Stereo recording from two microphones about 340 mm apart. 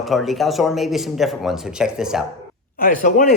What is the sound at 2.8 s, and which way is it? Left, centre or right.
Speech, left.